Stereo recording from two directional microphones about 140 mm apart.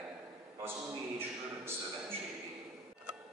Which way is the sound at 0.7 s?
15° right (ahead or behind).